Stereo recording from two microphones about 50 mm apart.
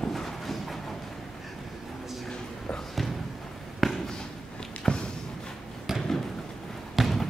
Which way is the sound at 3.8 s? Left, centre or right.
Centre.